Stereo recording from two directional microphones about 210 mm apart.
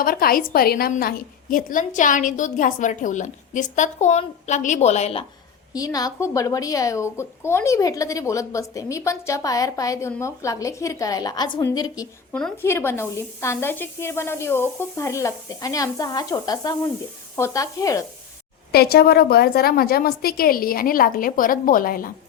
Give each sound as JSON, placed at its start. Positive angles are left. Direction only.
{"t": 0.0, "sound": "a woman's voice", "side_deg": 45}
{"t": 5.7, "sound": "a woman's voice", "side_deg": 15}
{"t": 12.3, "sound": "a woman's voice", "side_deg": 5}
{"t": 18.7, "sound": "a woman's voice", "side_deg": 50}